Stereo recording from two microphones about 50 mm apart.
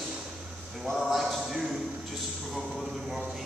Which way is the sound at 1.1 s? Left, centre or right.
Centre.